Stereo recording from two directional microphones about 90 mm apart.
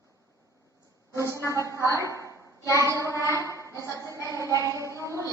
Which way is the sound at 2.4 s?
35° right (ahead or behind).